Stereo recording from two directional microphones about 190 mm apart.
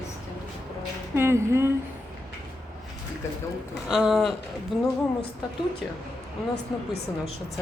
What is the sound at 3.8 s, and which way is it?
Speech, 5° right (ahead or behind).